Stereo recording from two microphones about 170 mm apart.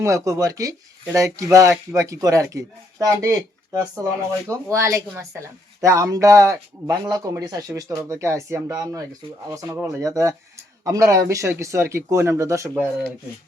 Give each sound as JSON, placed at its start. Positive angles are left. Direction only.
{"t": 0.0, "sound": "speech", "side_deg": -20}